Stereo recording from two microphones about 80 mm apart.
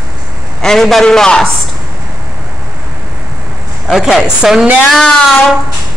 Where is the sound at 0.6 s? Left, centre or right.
Centre.